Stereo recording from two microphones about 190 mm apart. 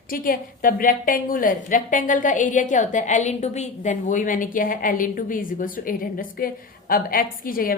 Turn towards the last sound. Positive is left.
turn(degrees=50)  # may be behind; listen again after turning